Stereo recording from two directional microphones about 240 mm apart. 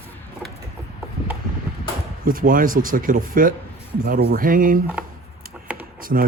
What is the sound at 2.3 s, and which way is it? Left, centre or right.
Speech, right.